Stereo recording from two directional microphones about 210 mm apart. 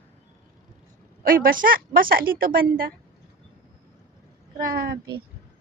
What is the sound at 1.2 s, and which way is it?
A woman's voice, 45° right (ahead or behind).